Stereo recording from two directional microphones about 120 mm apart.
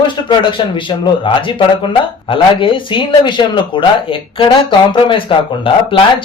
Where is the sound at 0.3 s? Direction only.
45° left (ahead or behind).